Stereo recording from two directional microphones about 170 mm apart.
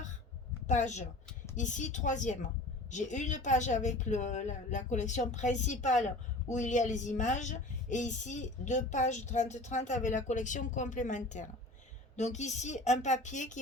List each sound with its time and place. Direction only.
0.7 s a woman's voice: 45° left (ahead or behind)